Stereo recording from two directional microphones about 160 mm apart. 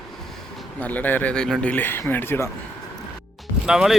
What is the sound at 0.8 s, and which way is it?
Speech, 10° left (ahead or behind).